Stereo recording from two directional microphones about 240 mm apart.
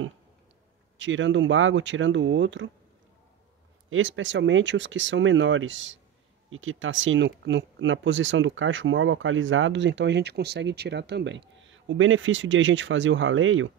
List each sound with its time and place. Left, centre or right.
0.9 s speech: right
3.9 s speech: right